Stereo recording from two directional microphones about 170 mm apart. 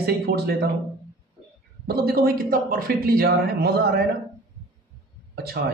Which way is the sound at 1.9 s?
65° right (ahead or behind).